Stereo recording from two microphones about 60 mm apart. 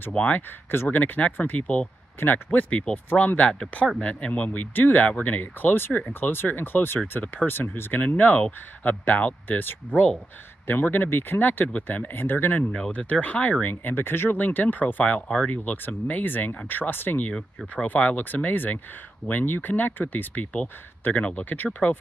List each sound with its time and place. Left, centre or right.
0.1 s speech: left
2.1 s speech: left
8.2 s speech: left
12.7 s speech: centre
15.2 s speech: centre
15.5 s speech: left